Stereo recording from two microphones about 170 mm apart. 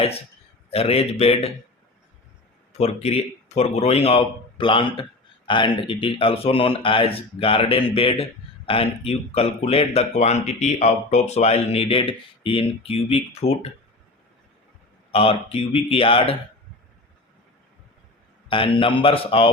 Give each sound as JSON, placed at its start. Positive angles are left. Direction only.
{"t": 0.7, "sound": "speech", "side_deg": 35}
{"t": 2.7, "sound": "speech", "side_deg": 40}
{"t": 15.1, "sound": "speech", "side_deg": 35}
{"t": 18.4, "sound": "speech", "side_deg": 30}